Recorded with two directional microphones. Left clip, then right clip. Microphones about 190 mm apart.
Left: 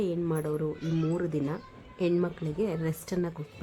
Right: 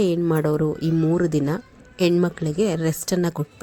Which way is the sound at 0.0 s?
30° right (ahead or behind).